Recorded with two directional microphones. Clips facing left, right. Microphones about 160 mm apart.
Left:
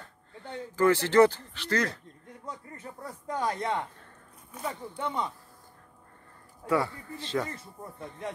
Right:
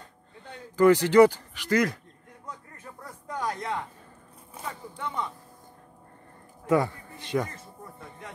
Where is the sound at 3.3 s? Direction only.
30° left (ahead or behind).